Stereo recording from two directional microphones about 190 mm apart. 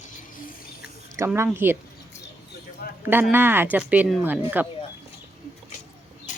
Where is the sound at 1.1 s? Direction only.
15° right (ahead or behind).